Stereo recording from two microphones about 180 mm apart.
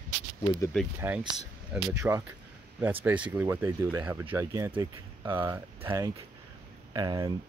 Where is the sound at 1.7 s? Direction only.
15° right (ahead or behind).